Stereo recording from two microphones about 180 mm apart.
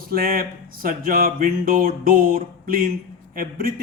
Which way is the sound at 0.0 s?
55° right (ahead or behind).